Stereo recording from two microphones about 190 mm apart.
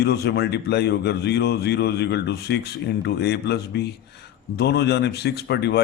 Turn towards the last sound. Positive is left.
turn(degrees=60)  # may be behind; listen again after turning